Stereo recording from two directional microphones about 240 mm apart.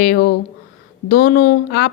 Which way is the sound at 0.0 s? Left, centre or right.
Left.